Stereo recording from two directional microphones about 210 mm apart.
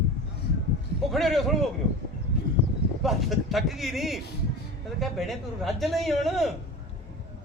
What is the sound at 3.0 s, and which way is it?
A man's voice, centre (ahead or behind).